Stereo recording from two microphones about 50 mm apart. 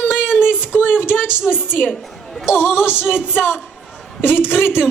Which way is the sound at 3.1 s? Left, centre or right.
Left.